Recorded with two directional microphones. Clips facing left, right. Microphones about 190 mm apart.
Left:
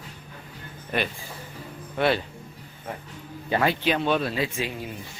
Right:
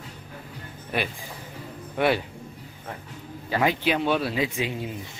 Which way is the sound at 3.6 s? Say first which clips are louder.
Right 1 dB; 15° right (ahead or behind).